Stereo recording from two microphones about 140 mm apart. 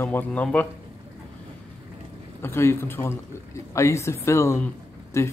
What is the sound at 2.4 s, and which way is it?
Speech, 15° left (ahead or behind).